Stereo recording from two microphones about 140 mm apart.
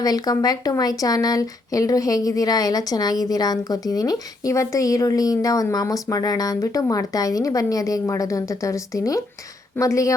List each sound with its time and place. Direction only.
0.0 s speech: 25° left (ahead or behind)